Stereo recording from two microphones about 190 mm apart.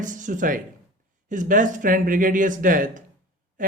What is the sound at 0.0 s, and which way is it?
Speech, 40° right (ahead or behind).